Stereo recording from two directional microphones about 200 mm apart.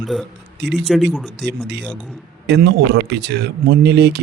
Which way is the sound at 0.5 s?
60° right (ahead or behind).